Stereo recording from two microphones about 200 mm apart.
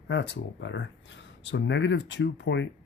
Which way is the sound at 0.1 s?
65° left (ahead or behind).